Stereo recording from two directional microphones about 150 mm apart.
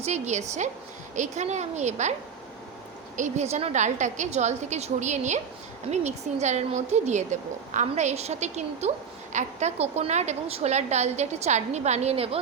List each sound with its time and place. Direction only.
0.0 s a woman's voice: 50° right (ahead or behind)
3.2 s a woman's voice: 50° right (ahead or behind)